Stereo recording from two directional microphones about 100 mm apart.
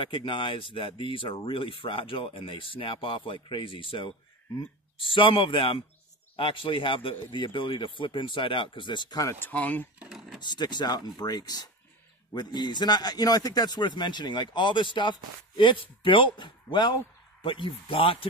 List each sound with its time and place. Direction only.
0.0 s speech: 60° left (ahead or behind)
9.2 s speech: 25° left (ahead or behind)
9.5 s speech: 15° left (ahead or behind)
10.0 s a sound: 5° right (ahead or behind)
10.4 s a man's voice: 45° left (ahead or behind); by 18.2 s 65° left (ahead or behind)